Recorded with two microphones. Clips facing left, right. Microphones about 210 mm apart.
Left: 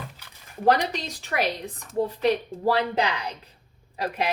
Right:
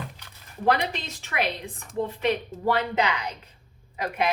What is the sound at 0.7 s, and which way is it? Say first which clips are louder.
Speech: left 2 dB; 40° left (ahead or behind).